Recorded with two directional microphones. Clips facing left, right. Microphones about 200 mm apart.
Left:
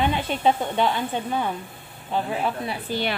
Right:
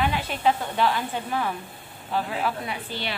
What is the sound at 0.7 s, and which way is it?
A woman's voice, 20° left (ahead or behind).